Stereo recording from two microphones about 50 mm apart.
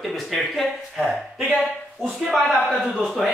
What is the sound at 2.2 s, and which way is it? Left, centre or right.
Speech, centre.